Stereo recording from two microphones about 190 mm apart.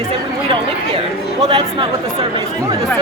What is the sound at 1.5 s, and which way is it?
Speech, 30° right (ahead or behind).